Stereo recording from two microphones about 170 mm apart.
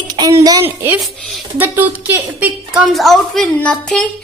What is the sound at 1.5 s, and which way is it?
A woman's voice, 10° right (ahead or behind).